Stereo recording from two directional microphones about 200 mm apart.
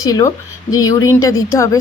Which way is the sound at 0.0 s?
15° left (ahead or behind).